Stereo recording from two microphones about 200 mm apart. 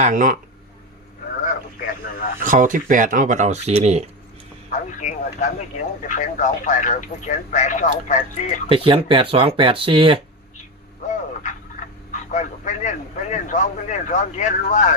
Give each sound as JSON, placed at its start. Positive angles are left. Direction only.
{"t": 0.0, "sound": "speech", "side_deg": -40}
{"t": 1.5, "sound": "radio", "side_deg": 45}
{"t": 2.4, "sound": "speech", "side_deg": -40}
{"t": 4.9, "sound": "speech", "side_deg": 40}
{"t": 8.7, "sound": "speech", "side_deg": -25}
{"t": 12.3, "sound": "speech", "side_deg": 35}